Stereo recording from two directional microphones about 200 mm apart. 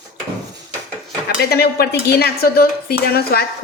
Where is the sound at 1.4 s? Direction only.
55° left (ahead or behind).